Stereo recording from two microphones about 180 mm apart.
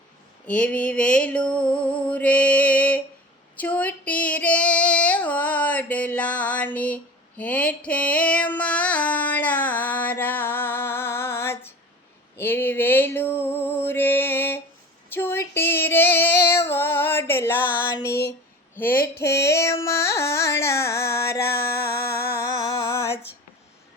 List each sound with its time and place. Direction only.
0.4 s a sound: 5° left (ahead or behind)
3.6 s female singing: 10° left (ahead or behind)
12.4 s music: 10° left (ahead or behind)
15.1 s female singing: 10° left (ahead or behind)
17.9 s a sound: 15° left (ahead or behind)
19.8 s carnatic music: 15° left (ahead or behind)
21.8 s music: 15° left (ahead or behind)